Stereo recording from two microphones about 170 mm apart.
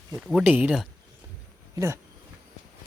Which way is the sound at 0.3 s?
5° right (ahead or behind).